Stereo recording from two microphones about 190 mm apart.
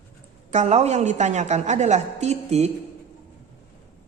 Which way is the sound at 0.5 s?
35° right (ahead or behind).